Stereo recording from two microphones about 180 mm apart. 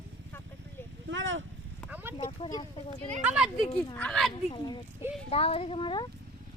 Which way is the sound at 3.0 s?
35° right (ahead or behind).